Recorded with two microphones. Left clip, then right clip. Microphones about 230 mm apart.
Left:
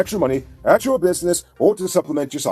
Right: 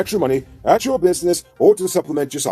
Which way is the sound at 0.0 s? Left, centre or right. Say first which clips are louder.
Right 1 dB; left.